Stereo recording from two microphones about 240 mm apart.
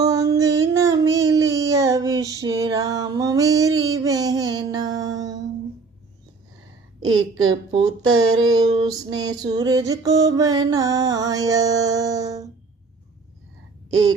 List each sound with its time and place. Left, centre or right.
0.0 s a sound: centre
7.0 s a woman's voice: right
7.7 s music: right